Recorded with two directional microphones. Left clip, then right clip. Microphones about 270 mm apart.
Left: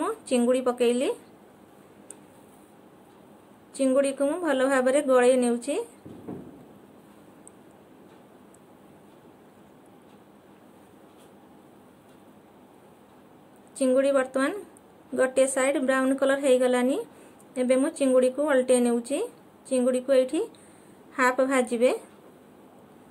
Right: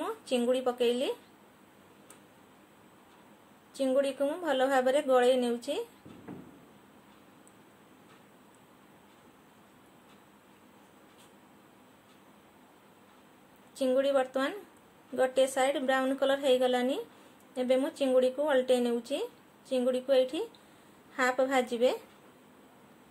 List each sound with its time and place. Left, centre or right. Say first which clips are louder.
0.0 s speech: left 6 dB; centre
3.7 s a woman's voice: left 5 dB; centre
13.7 s a woman's voice: left 5 dB; centre